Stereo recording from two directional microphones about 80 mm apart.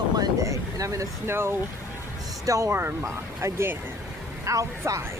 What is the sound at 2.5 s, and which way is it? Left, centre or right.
Speech, right.